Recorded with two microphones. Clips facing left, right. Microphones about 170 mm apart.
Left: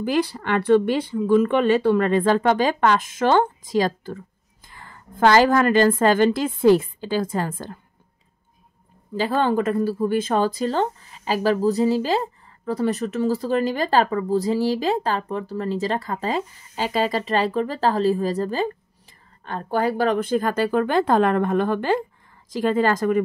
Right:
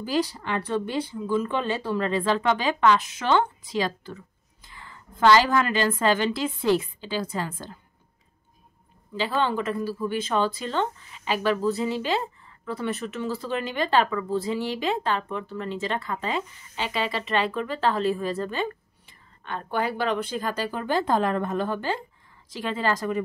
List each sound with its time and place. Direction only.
0.0 s speech: 60° left (ahead or behind)
9.1 s speech: 45° left (ahead or behind)
22.5 s speech: 45° left (ahead or behind)